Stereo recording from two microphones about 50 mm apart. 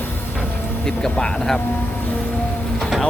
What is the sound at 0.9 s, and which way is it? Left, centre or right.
Speech, centre.